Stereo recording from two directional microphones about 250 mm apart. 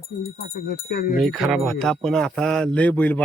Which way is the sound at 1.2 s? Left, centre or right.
Centre.